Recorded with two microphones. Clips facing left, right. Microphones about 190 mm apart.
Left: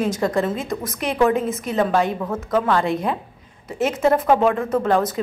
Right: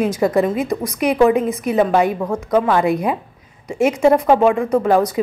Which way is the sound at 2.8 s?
Centre (ahead or behind).